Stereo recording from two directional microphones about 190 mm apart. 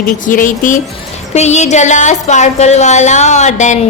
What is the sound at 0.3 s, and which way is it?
A woman's voice, 45° left (ahead or behind).